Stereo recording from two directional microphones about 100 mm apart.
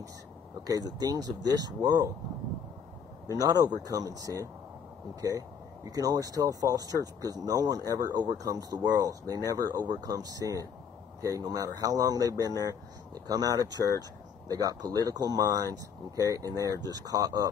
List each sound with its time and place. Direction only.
0.7 s speech: 40° right (ahead or behind)
3.3 s speech: 35° right (ahead or behind)
5.9 s speech: 35° right (ahead or behind)